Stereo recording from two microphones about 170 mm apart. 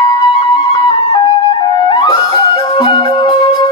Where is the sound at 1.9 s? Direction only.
30° left (ahead or behind).